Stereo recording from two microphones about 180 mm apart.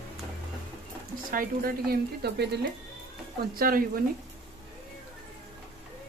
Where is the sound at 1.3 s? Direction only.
55° right (ahead or behind).